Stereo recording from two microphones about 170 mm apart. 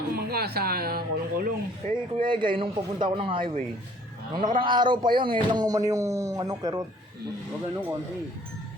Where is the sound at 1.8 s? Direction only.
45° right (ahead or behind).